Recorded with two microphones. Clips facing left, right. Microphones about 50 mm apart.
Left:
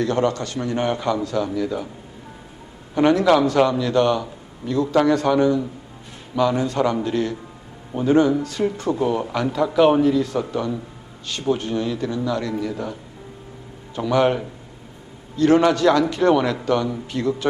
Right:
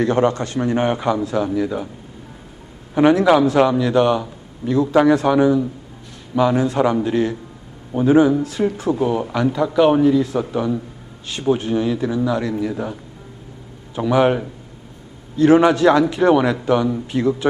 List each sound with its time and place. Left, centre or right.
0.0 s a man's voice: right
2.9 s a man's voice: centre